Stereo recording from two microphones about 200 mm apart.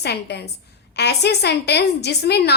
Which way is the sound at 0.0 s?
55° left (ahead or behind).